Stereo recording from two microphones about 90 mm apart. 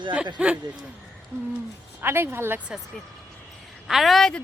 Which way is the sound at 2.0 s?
25° right (ahead or behind).